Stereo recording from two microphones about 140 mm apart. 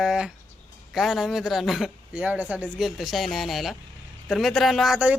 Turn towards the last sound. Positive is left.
turn(degrees=-5)  # may be behind; listen again after turning